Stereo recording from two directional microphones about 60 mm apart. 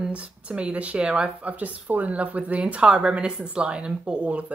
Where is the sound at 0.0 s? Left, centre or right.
Right.